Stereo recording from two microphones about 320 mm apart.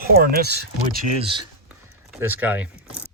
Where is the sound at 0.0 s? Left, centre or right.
Right.